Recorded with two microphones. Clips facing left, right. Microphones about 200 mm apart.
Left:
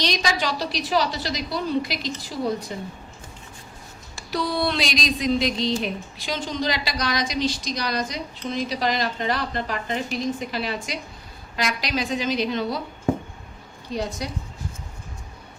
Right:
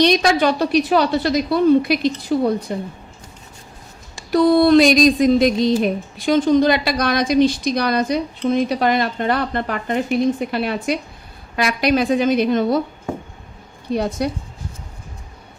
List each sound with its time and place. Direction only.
0.0 s a woman's voice: 55° right (ahead or behind)
4.3 s a sound: 50° right (ahead or behind)
5.8 s a woman's voice: 50° right (ahead or behind)
13.9 s a woman's voice: 60° right (ahead or behind)